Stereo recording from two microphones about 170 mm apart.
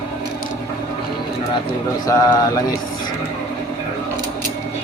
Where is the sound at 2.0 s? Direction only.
20° left (ahead or behind).